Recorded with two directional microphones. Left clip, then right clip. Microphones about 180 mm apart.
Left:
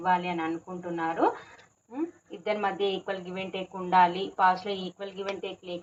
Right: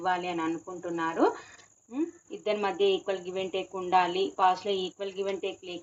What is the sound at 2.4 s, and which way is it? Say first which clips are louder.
Speech: right 1 dB; 30° right (ahead or behind).